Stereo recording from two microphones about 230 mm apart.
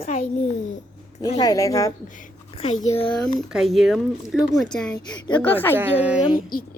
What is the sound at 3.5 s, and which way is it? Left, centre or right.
Speech, centre.